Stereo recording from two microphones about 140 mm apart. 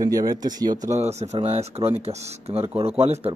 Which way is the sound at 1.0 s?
50° right (ahead or behind).